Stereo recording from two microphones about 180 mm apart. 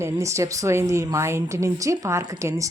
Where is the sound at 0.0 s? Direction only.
15° right (ahead or behind).